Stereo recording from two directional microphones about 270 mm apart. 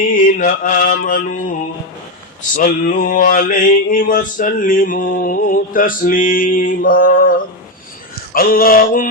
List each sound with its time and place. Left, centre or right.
0.1 s mantra: left
2.6 s mantra: left